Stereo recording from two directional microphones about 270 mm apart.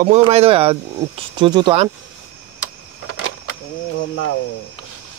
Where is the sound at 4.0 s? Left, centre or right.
Left.